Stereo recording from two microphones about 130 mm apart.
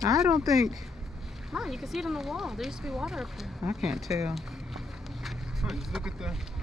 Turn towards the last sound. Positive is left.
turn(degrees=-5)  # may be behind; listen again after turning